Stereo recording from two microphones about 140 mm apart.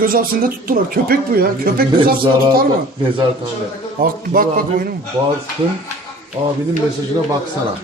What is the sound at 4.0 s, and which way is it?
Speech, 90° right.